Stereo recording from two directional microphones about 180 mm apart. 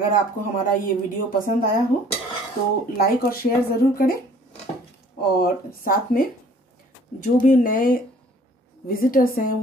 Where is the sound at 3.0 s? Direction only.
55° left (ahead or behind).